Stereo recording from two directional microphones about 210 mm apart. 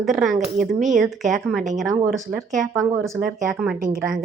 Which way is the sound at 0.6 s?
35° right (ahead or behind).